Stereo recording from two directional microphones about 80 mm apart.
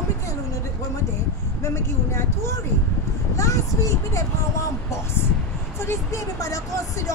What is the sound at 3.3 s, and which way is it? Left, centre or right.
Speech, left.